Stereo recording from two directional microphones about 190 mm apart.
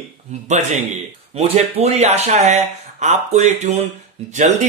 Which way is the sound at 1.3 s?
30° right (ahead or behind).